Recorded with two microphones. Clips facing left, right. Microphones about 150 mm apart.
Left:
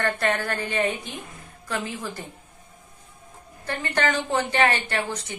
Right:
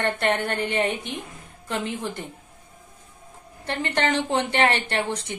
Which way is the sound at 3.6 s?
25° right (ahead or behind).